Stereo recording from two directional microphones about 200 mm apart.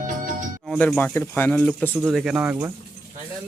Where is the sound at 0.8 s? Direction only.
10° left (ahead or behind).